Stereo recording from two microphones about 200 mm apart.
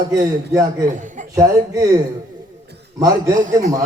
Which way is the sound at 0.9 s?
40° right (ahead or behind).